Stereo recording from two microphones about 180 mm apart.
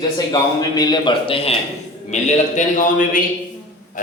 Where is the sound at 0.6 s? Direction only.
20° left (ahead or behind).